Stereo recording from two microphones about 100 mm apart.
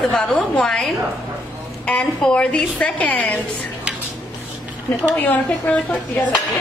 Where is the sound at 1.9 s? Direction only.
10° left (ahead or behind).